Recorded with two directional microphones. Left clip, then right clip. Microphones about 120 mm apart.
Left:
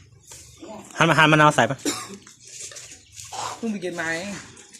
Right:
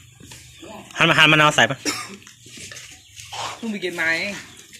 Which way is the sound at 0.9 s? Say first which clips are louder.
Right 2 dB; 20° left (ahead or behind).